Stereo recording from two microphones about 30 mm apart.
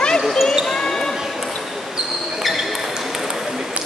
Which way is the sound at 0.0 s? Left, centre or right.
Left.